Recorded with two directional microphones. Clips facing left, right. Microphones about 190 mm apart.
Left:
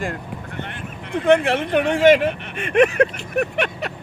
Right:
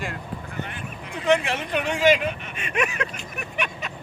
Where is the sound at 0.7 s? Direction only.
55° left (ahead or behind).